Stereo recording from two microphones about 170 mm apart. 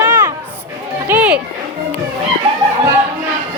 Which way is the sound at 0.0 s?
15° right (ahead or behind).